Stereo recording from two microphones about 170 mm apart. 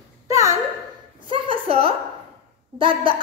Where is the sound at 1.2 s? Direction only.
30° right (ahead or behind).